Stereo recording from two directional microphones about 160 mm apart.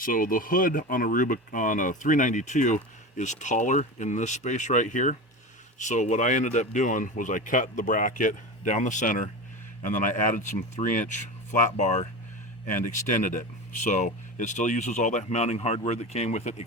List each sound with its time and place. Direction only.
0.0 s speech: 60° left (ahead or behind)